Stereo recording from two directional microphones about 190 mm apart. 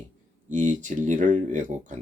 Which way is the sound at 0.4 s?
40° right (ahead or behind).